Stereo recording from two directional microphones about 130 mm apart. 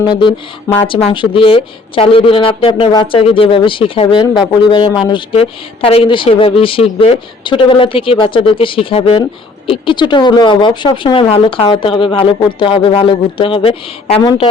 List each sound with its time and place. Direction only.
0.1 s speech: 40° left (ahead or behind)
5.4 s a woman's voice: 50° left (ahead or behind)